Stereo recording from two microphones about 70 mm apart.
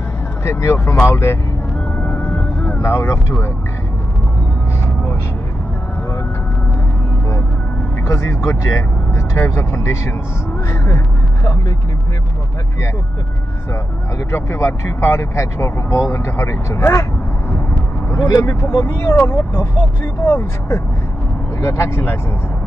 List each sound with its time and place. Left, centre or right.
0.4 s speech: left
2.0 s music: left
2.8 s speech: left
8.1 s speech: left
14.3 s speech: left
18.1 s speech: left
18.9 s speech: left